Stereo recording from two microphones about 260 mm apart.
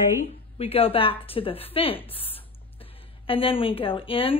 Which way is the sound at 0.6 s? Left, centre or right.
Left.